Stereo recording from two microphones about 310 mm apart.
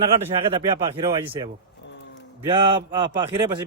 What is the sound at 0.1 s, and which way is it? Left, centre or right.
Speech, centre.